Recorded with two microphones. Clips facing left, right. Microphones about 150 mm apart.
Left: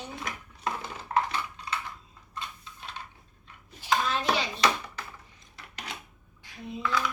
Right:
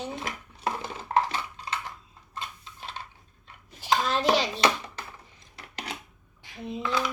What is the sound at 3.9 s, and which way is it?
Hands, 25° right (ahead or behind).